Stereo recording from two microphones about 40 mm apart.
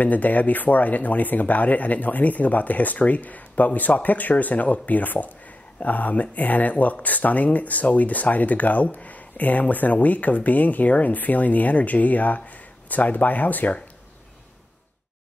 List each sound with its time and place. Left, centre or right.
0.0 s speech: left